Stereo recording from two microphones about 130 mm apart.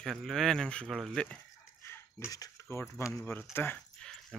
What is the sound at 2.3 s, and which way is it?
Speech, 25° left (ahead or behind).